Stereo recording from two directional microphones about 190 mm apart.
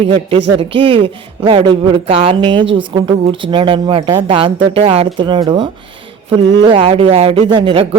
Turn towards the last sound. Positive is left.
turn(degrees=-25)  # may be behind; listen again after turning